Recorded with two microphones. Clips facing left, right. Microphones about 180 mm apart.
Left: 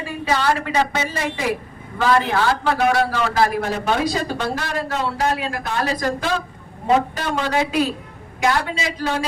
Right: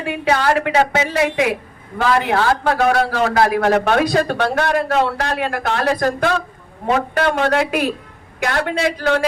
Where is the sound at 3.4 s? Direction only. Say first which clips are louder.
Right 5 dB; 75° right (ahead or behind).